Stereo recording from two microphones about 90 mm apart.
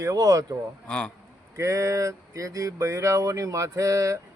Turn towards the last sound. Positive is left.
turn(degrees=-35)  # may be behind; listen again after turning